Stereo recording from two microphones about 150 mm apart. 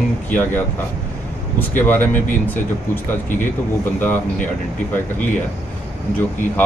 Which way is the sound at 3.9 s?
15° left (ahead or behind).